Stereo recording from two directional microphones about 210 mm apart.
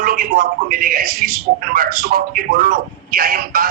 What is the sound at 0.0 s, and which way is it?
A man's voice, 45° right (ahead or behind).